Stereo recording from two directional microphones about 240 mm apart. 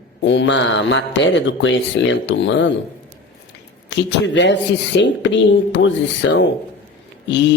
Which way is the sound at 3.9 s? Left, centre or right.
Left.